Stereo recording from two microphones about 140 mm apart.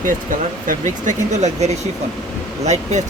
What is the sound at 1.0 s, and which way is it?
Speech, 55° right (ahead or behind).